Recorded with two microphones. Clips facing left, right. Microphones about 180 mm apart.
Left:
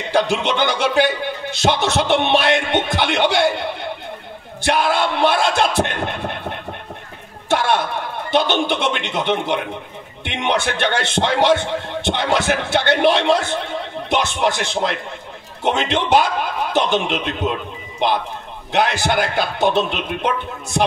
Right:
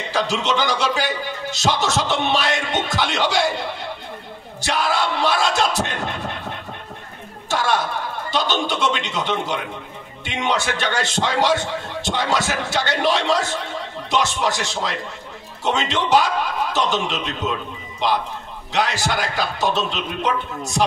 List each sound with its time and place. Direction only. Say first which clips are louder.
0.1 s speech: left 4 dB; 60° left (ahead or behind)
7.4 s a sound: left 3 dB; 60° left (ahead or behind)
8.3 s speech: left 5 dB; 60° left (ahead or behind)